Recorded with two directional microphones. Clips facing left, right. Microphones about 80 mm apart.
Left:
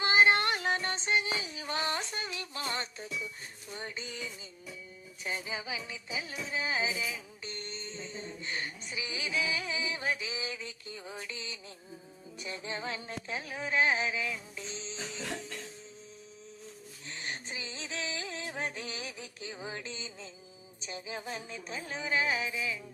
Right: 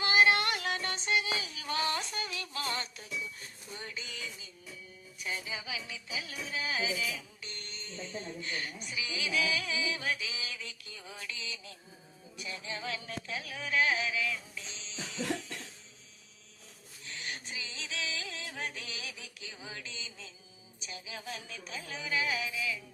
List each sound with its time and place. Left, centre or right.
0.0 s a sound: left
3.8 s music: left
17.1 s music: left